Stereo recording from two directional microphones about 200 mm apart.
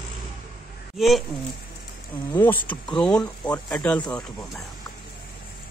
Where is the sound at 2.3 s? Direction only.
10° left (ahead or behind).